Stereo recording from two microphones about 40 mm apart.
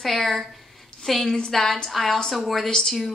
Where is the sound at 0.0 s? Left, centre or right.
Centre.